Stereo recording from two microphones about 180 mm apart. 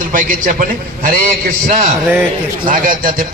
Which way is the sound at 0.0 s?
50° right (ahead or behind).